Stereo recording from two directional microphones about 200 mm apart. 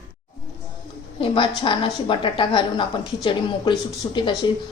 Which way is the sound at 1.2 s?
25° left (ahead or behind).